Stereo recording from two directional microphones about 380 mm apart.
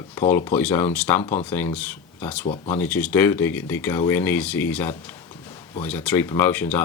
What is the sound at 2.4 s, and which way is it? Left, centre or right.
Speech, centre.